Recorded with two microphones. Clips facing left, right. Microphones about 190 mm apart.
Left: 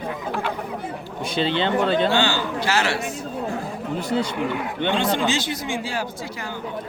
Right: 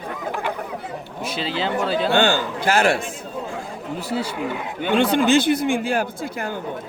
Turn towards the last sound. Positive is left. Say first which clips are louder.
# right 4 dB
turn(degrees=-55)  # may be behind; listen again after turning